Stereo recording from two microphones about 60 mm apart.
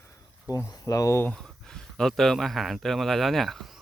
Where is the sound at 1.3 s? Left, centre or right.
Centre.